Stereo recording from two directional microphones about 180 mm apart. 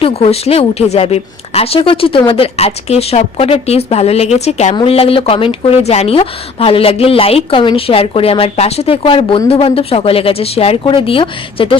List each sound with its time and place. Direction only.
0.0 s speech: 35° left (ahead or behind)